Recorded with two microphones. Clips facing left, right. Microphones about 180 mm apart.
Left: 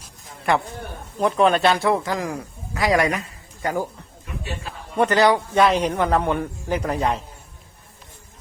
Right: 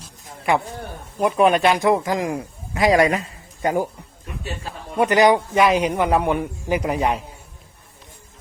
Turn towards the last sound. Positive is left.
turn(degrees=-15)  # may be behind; listen again after turning